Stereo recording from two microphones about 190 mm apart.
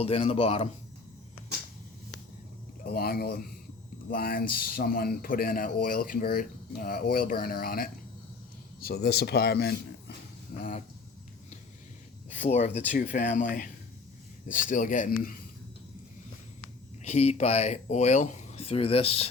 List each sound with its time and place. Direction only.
0.0 s speech: 30° left (ahead or behind)
2.8 s a man's voice: 55° left (ahead or behind)
10.6 s speech: 40° left (ahead or behind)
12.4 s a man's voice: 35° left (ahead or behind)
17.0 s speech: 35° left (ahead or behind)